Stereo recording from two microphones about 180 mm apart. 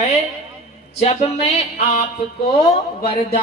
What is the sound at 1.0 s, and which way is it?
Speech, 40° left (ahead or behind).